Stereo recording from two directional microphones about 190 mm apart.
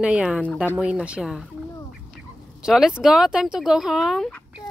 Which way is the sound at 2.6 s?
5° right (ahead or behind).